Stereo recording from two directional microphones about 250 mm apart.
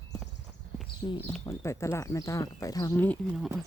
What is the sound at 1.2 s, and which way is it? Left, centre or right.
Speech, centre.